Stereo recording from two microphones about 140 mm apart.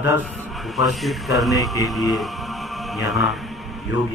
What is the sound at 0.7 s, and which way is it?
A man's voice, centre (ahead or behind).